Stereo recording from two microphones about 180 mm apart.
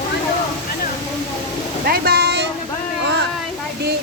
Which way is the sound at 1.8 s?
60° right (ahead or behind).